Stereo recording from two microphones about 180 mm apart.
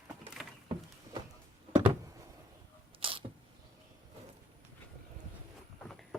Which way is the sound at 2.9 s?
30° right (ahead or behind).